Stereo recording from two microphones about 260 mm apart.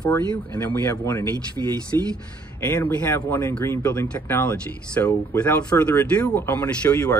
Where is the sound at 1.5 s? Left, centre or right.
Centre.